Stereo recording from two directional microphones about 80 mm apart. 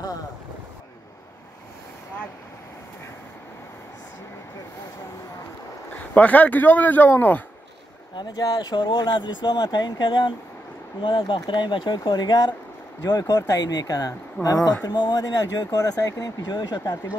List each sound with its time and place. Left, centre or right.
6.1 s speech: centre
8.2 s speech: left
11.0 s speech: left
13.0 s speech: left